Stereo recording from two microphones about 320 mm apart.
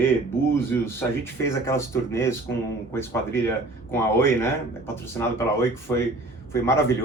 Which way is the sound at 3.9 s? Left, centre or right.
Centre.